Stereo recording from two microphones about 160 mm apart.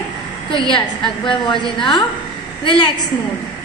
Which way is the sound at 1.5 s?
30° left (ahead or behind).